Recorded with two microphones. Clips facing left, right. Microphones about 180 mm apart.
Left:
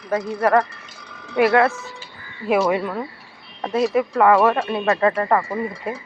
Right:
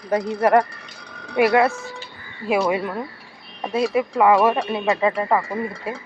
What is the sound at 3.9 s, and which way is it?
Speech, 10° right (ahead or behind).